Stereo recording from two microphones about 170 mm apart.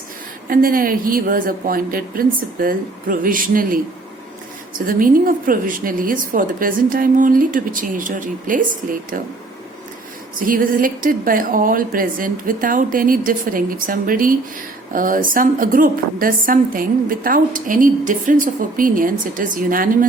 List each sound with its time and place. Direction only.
0.4 s a woman's voice: 55° right (ahead or behind)
4.9 s a woman's voice: 55° right (ahead or behind)
10.4 s a woman's voice: 55° right (ahead or behind)